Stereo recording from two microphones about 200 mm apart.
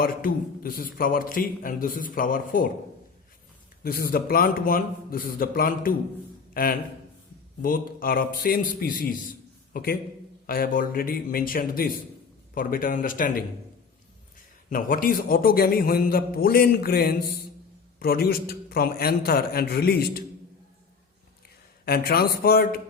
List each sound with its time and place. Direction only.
0.0 s a man's voice: 45° left (ahead or behind)
3.8 s a man's voice: 50° left (ahead or behind)
14.7 s a man's voice: 45° left (ahead or behind)
21.8 s a man's voice: 50° left (ahead or behind)